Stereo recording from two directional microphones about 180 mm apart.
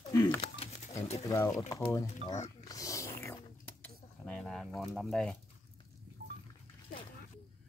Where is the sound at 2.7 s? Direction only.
20° left (ahead or behind).